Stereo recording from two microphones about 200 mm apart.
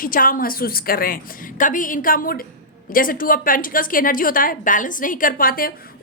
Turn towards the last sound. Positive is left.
turn(degrees=45)  # may be behind; listen again after turning